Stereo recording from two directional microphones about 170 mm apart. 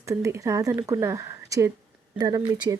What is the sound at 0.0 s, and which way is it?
A woman's voice, 20° right (ahead or behind).